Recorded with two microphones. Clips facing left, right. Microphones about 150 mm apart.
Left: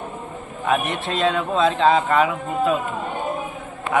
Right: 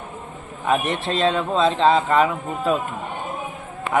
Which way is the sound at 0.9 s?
30° right (ahead or behind).